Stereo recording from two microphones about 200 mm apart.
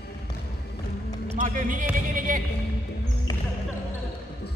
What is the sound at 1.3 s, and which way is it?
Speech, 40° right (ahead or behind).